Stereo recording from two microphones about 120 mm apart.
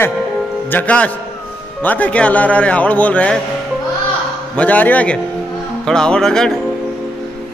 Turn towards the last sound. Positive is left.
turn(degrees=5)  # may be behind; listen again after turning